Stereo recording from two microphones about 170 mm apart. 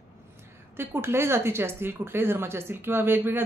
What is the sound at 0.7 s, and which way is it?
Speech, 15° right (ahead or behind).